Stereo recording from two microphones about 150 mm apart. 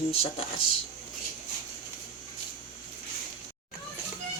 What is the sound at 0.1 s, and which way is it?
Speech, 40° left (ahead or behind).